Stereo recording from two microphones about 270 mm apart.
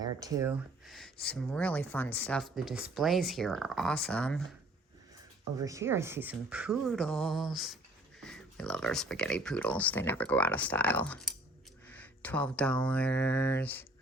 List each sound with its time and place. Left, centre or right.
0.0 s speech: centre
0.9 s speech: centre
5.5 s speech: centre